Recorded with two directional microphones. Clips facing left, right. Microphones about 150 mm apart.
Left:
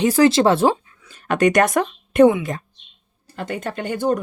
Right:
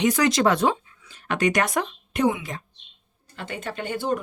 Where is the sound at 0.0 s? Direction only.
30° left (ahead or behind).